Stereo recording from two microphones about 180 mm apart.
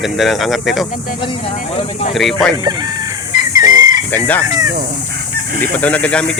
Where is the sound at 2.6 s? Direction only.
20° right (ahead or behind).